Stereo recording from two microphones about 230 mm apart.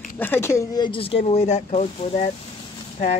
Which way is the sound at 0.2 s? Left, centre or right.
Centre.